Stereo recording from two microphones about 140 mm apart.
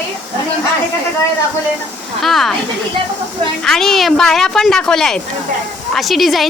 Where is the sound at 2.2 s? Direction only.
Centre (ahead or behind).